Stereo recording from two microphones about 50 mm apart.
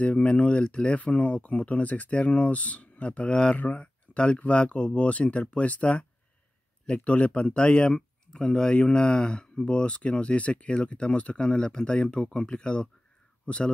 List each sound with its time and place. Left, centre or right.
0.0 s speech: left